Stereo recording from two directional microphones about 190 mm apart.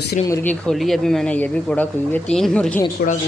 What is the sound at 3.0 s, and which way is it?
Speech, 50° left (ahead or behind).